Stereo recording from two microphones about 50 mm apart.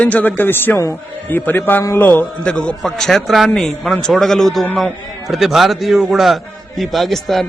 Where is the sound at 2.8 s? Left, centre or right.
Centre.